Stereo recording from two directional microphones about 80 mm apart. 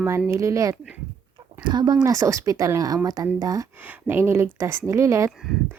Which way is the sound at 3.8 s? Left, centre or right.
Right.